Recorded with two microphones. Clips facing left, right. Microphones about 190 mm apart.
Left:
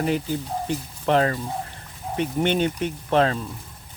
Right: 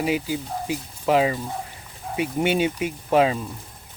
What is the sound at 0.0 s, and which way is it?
Speech, 5° right (ahead or behind).